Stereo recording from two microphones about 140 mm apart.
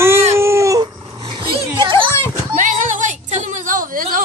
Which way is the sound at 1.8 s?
35° right (ahead or behind).